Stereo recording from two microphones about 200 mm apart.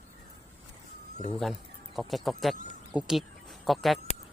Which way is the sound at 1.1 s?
35° left (ahead or behind).